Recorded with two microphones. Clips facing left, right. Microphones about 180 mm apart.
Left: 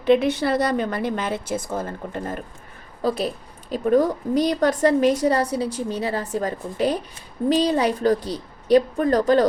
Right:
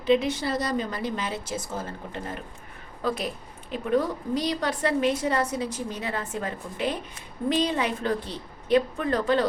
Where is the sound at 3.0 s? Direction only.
35° left (ahead or behind).